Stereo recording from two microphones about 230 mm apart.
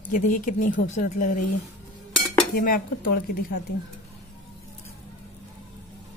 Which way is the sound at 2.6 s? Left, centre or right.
Left.